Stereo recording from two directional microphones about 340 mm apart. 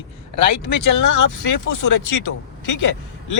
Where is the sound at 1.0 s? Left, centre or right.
Left.